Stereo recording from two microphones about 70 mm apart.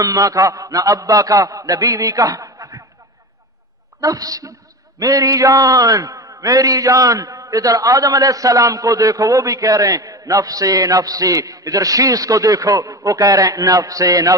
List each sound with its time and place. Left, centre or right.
0.0 s a man's voice: right
4.0 s a man's voice: right